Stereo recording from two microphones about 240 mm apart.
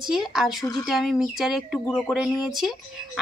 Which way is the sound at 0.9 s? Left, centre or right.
Centre.